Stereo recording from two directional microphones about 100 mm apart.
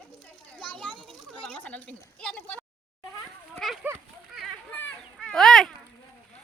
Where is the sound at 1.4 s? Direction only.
10° left (ahead or behind).